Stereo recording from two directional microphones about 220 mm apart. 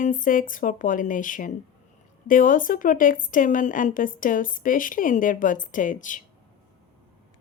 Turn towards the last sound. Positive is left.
turn(degrees=35)  # may be behind; listen again after turning